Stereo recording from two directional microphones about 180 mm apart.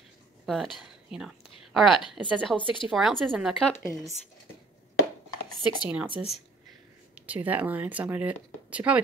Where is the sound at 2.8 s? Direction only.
Centre (ahead or behind).